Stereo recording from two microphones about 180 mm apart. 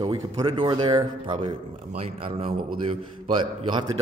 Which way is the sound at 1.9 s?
35° right (ahead or behind).